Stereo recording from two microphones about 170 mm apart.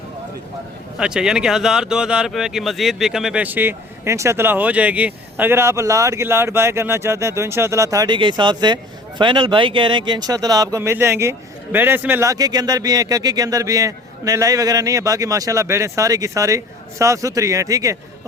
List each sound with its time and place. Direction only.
0.9 s speech: 5° right (ahead or behind)